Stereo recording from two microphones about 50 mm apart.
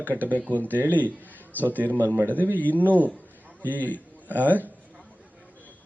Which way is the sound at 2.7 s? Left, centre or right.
Right.